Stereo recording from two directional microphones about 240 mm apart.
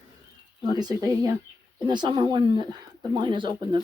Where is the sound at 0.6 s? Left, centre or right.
Centre.